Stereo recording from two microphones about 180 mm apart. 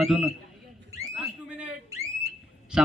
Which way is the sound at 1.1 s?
5° right (ahead or behind).